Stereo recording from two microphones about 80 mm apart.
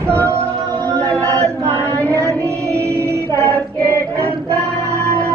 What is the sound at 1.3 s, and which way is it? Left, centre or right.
Chant, right.